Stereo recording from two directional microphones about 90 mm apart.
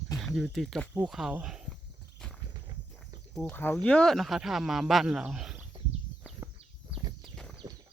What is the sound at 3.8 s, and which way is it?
Speech, 10° left (ahead or behind).